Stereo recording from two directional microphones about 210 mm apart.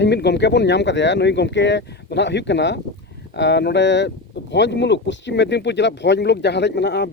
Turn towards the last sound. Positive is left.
turn(degrees=55)  # may be behind; listen again after turning